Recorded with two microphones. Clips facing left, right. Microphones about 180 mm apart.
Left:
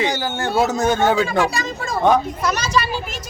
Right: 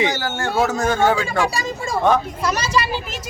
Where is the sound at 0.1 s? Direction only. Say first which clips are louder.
Left 1 dB; 15° left (ahead or behind).